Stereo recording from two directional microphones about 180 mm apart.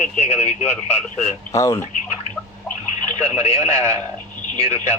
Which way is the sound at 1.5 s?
15° left (ahead or behind).